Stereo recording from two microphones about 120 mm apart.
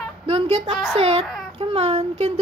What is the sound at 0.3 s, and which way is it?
A woman's voice, 55° right (ahead or behind).